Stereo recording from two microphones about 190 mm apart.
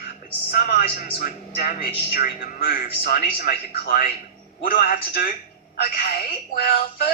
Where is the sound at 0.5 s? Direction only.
50° left (ahead or behind).